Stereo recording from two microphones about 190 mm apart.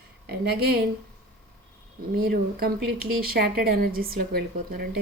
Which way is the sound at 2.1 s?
50° right (ahead or behind).